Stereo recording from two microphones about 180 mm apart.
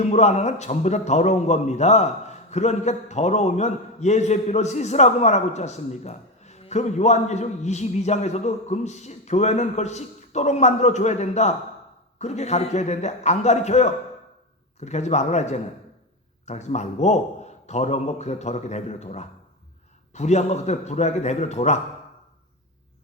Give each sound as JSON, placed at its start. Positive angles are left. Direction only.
{"t": 0.0, "sound": "a man's voice", "side_deg": 40}